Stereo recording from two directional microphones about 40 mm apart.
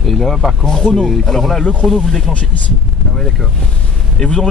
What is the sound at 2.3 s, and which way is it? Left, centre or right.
Speech, left.